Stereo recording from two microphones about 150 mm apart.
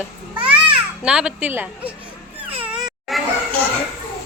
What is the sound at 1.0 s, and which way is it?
Speech, 5° right (ahead or behind).